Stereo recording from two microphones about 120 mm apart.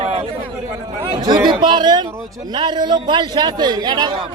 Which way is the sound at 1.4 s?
40° right (ahead or behind).